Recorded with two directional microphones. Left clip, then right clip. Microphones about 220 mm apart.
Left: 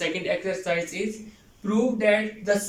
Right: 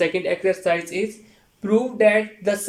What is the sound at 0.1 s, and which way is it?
Speech, 50° right (ahead or behind).